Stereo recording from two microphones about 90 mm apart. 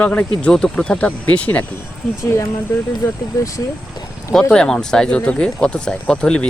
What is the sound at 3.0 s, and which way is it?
Speech, 30° left (ahead or behind).